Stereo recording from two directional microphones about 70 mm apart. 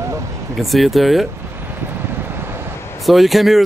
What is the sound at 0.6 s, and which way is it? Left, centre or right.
Speech, centre.